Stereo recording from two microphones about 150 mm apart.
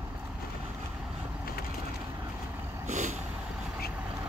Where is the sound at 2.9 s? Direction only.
55° right (ahead or behind).